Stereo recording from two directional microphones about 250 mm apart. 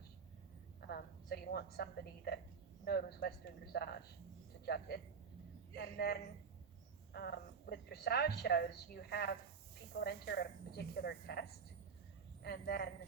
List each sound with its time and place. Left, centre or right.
0.8 s a woman's voice: left